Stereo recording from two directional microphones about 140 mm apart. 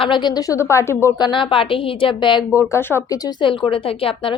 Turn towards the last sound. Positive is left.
turn(degrees=40)  # may be behind; listen again after turning